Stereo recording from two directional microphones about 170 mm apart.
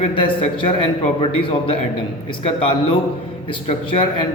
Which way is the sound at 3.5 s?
30° left (ahead or behind).